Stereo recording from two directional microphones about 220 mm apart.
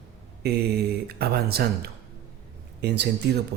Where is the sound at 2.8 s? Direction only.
50° right (ahead or behind).